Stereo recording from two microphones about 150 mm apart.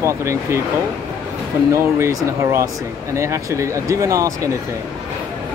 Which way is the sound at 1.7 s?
20° right (ahead or behind).